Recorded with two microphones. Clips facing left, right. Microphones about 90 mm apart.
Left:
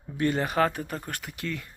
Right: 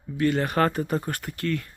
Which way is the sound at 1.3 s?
15° left (ahead or behind).